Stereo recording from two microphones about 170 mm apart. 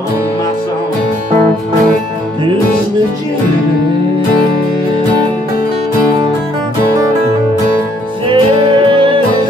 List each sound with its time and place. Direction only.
8.3 s music: 30° right (ahead or behind)